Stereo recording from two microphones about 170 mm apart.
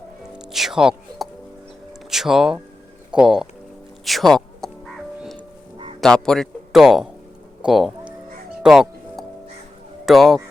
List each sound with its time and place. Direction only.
0.3 s music: centre (ahead or behind)
2.0 s speech: centre (ahead or behind)
5.7 s music: 30° right (ahead or behind)
6.0 s a man's voice: 5° left (ahead or behind)
8.6 s music: centre (ahead or behind)
10.1 s speech: centre (ahead or behind)